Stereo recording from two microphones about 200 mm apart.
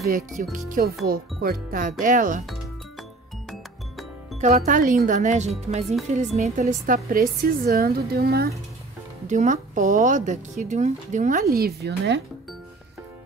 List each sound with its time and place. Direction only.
0.0 s a woman's voice: 45° right (ahead or behind)
3.4 s music: centre (ahead or behind)
4.4 s a woman's voice: 35° right (ahead or behind)
9.3 s speech: 35° right (ahead or behind)
11.5 s a woman's voice: 50° right (ahead or behind)